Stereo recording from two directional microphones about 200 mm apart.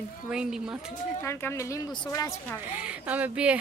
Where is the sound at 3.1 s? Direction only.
5° right (ahead or behind).